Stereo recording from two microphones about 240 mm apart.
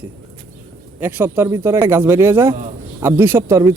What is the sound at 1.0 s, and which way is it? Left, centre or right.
Speech, centre.